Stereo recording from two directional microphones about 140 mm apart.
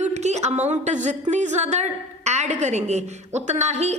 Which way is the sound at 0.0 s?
55° right (ahead or behind).